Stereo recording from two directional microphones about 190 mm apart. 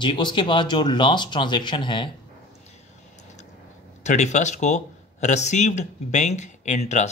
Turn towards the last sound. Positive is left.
turn(degrees=35)  # may be behind; listen again after turning